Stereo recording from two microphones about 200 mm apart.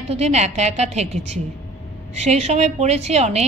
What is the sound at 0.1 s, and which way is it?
A woman's voice, 35° right (ahead or behind).